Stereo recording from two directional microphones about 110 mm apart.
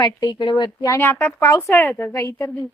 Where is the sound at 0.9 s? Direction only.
20° left (ahead or behind).